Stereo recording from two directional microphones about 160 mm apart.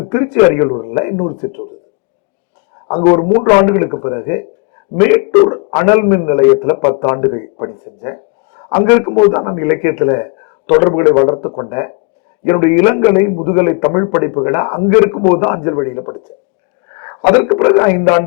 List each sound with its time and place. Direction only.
0.1 s a man's voice: 15° left (ahead or behind)
3.0 s a man's voice: 20° left (ahead or behind)